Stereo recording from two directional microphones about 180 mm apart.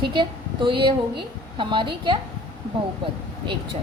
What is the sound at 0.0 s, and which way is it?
A woman's voice, 25° right (ahead or behind).